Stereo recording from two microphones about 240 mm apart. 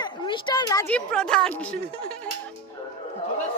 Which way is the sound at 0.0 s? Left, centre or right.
Centre.